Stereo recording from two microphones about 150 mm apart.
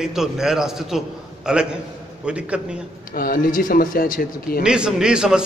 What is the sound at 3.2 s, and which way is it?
Speech, 70° left (ahead or behind).